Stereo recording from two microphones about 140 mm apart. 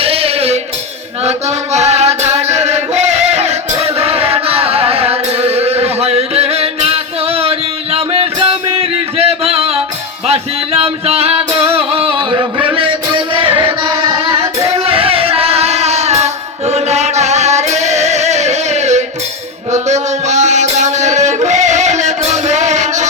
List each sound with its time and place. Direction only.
0.0 s music: 45° right (ahead or behind)
1.2 s chant: 50° right (ahead or behind)
10.2 s music: 45° right (ahead or behind); by 14.7 s 20° right (ahead or behind)
14.8 s music: 40° right (ahead or behind)